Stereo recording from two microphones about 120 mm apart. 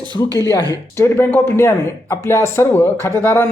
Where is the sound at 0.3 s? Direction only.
30° left (ahead or behind).